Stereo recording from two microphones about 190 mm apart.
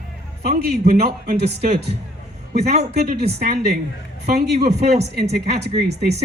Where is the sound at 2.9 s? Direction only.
60° right (ahead or behind).